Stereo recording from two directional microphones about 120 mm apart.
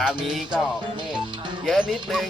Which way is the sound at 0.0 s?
5° right (ahead or behind).